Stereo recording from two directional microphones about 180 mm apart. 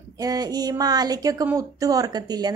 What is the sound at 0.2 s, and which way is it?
A woman's voice, 20° right (ahead or behind).